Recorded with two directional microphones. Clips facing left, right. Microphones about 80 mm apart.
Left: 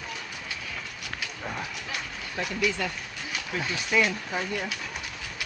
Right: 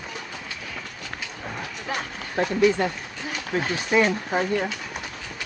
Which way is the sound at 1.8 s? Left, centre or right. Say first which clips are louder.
Right 5 dB; right.